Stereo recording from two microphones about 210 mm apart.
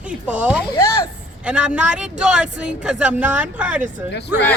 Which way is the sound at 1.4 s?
5° right (ahead or behind).